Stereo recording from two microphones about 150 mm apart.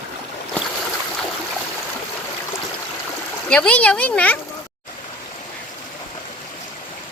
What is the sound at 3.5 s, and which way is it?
Speech, 10° left (ahead or behind).